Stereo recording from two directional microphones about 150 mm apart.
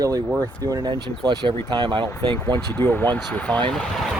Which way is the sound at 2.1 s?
15° left (ahead or behind).